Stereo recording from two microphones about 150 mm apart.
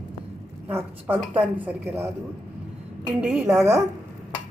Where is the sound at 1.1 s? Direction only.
10° right (ahead or behind).